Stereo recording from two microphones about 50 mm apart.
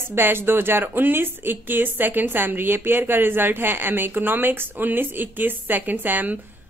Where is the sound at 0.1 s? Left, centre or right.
Right.